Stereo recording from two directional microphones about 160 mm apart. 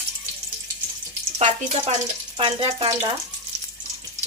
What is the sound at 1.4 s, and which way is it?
Speech, 45° right (ahead or behind).